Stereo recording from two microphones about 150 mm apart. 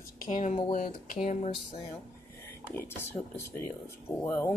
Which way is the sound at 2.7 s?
15° left (ahead or behind).